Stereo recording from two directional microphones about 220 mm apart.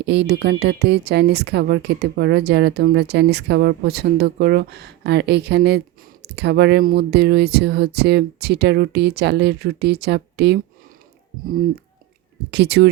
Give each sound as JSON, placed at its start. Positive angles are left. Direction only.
{"t": 0.0, "sound": "speech", "side_deg": -50}
{"t": 12.5, "sound": "speech", "side_deg": -50}